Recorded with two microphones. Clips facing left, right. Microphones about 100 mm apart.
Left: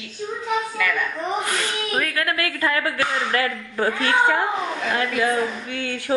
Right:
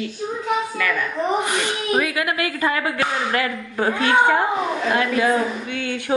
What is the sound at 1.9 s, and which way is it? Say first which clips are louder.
Speech: right 2 dB; 10° right (ahead or behind).